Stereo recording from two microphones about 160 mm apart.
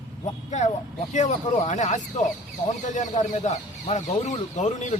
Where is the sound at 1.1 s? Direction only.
45° left (ahead or behind).